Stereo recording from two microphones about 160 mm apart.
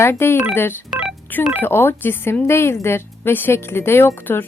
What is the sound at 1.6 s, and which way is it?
Speech, 15° left (ahead or behind).